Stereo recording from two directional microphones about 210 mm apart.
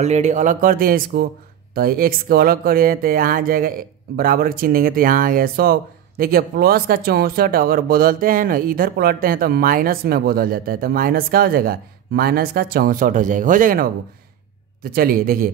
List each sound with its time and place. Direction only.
0.0 s speech: 35° right (ahead or behind)